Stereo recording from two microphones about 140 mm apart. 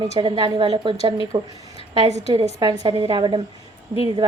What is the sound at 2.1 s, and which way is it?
Speech, 55° right (ahead or behind).